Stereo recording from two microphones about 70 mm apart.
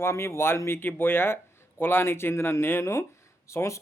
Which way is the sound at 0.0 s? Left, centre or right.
Left.